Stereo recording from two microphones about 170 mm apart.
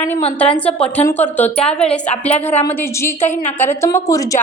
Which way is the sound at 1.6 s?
35° left (ahead or behind).